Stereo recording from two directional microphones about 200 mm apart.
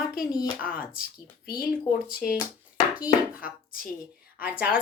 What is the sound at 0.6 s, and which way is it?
Speech, 45° left (ahead or behind).